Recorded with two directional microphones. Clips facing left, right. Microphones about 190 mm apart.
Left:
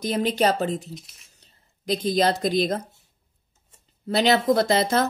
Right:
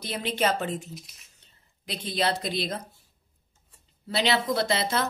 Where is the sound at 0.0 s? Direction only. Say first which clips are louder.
Left 6 dB; 45° left (ahead or behind).